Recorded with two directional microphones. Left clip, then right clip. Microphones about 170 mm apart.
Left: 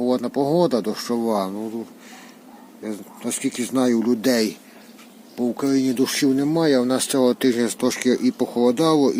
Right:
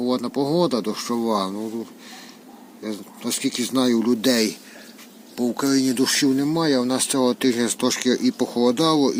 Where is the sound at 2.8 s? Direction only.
10° left (ahead or behind).